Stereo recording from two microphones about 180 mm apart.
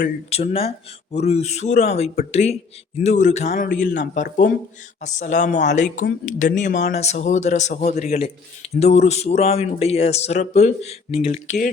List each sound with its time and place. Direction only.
0.3 s speech: 35° left (ahead or behind)